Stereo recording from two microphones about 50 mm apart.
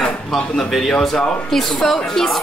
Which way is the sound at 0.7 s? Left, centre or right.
Centre.